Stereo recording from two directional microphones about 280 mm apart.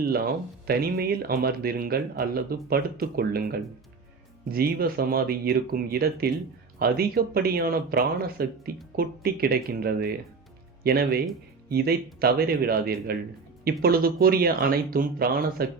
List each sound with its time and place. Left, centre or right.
0.7 s speech: right
12.2 s speech: right